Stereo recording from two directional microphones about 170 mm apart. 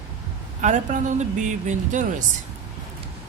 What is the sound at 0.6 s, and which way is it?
Speech, 45° right (ahead or behind).